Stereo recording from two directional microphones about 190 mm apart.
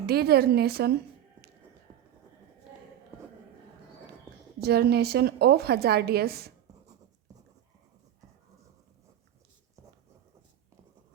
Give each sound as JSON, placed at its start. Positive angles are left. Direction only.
{"t": 0.0, "sound": "a woman's voice", "side_deg": -55}
{"t": 4.6, "sound": "a woman's voice", "side_deg": -55}